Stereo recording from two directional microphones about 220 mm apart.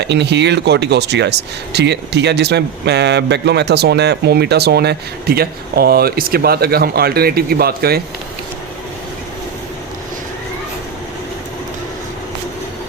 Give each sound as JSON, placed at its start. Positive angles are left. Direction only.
{"t": 0.0, "sound": "speech", "side_deg": -50}